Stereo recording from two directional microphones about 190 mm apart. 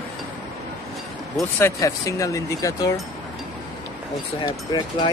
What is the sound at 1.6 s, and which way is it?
Speech, 15° left (ahead or behind).